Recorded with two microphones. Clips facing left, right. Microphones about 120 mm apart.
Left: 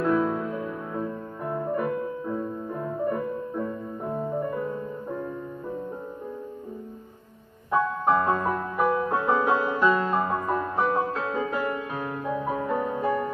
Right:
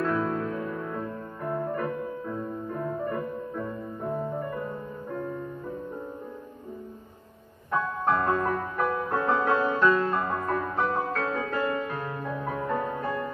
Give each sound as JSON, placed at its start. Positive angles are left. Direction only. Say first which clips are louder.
{"t": 0.0, "sound": "music", "louder": "left 3 dB", "side_deg": 15}
{"t": 3.6, "sound": "music", "louder": "left 1 dB", "side_deg": 5}
{"t": 7.7, "sound": "music", "louder": "left 3 dB", "side_deg": 20}